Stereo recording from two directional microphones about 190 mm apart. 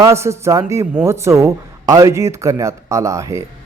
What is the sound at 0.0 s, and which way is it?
A man's voice, 15° right (ahead or behind).